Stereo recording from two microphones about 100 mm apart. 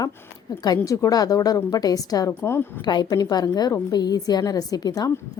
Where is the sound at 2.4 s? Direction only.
25° left (ahead or behind).